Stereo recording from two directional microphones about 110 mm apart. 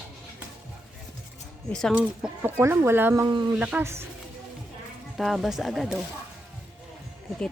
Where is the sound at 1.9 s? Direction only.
15° right (ahead or behind).